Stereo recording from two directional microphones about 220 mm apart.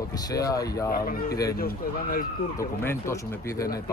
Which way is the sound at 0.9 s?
40° left (ahead or behind).